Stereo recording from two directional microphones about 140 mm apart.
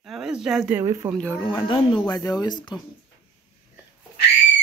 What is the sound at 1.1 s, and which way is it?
Speech, 10° left (ahead or behind).